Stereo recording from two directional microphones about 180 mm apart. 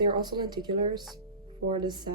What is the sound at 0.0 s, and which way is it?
Speech, 25° right (ahead or behind).